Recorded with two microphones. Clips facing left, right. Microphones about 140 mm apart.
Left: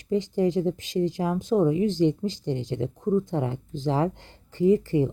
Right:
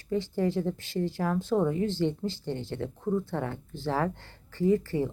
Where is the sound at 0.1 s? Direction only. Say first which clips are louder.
Left 4 dB; 15° left (ahead or behind).